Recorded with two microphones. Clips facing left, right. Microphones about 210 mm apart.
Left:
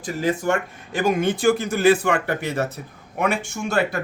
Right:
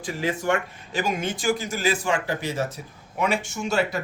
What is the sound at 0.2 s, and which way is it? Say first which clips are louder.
Speech: left 3 dB; 45° left (ahead or behind).